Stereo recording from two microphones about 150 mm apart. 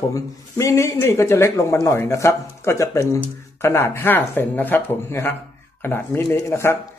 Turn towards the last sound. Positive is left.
turn(degrees=15)  # may be behind; listen again after turning